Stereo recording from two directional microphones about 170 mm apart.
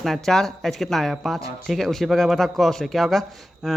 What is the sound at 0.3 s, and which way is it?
Speech, centre (ahead or behind).